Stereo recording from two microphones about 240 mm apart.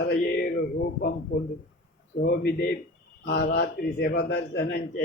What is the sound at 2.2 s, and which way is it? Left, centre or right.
A man's voice, left.